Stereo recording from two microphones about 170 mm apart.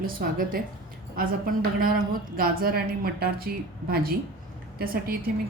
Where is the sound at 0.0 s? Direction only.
60° right (ahead or behind).